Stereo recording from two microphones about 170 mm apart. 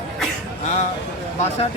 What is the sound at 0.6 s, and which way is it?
Speech, 40° left (ahead or behind).